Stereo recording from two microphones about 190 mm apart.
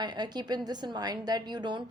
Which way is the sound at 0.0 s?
20° right (ahead or behind).